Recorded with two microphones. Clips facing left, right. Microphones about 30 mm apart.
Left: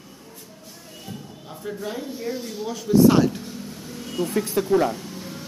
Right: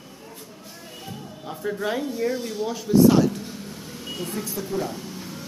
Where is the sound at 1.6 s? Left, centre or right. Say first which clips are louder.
Right 4 dB; centre.